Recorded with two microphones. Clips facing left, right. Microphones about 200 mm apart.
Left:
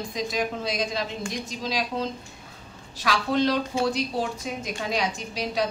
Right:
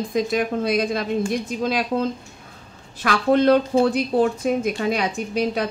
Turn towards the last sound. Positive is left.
turn(degrees=-55)  # may be behind; listen again after turning